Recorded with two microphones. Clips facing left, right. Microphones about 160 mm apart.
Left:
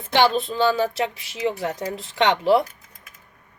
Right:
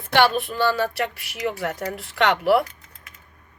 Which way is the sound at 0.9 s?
65° right (ahead or behind).